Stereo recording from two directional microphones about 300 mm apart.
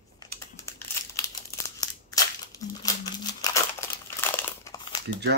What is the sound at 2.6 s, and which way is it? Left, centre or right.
Crumpling, centre.